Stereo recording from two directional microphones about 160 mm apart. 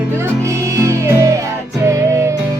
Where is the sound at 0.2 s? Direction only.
20° right (ahead or behind).